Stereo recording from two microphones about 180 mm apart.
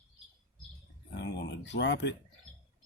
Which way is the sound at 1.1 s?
70° left (ahead or behind).